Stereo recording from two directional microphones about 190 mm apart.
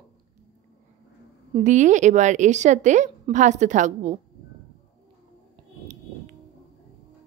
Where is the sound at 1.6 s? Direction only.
40° right (ahead or behind).